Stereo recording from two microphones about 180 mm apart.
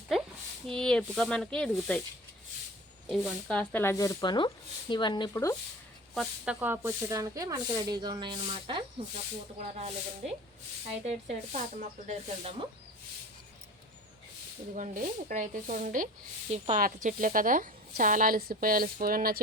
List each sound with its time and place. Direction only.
0.7 s speech: 5° left (ahead or behind)
3.1 s speech: centre (ahead or behind); by 5.5 s 15° left (ahead or behind)
6.1 s speech: 5° right (ahead or behind); by 8.8 s 25° right (ahead or behind)
9.6 s speech: 35° right (ahead or behind)
11.0 s speech: 40° right (ahead or behind)
14.8 s speech: 45° right (ahead or behind)